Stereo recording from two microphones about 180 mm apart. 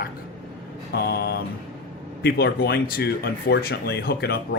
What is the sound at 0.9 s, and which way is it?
Speech, 60° left (ahead or behind).